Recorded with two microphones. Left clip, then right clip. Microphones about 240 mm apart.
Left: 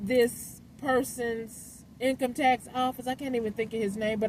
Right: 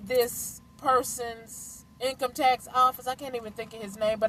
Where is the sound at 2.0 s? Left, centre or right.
Right.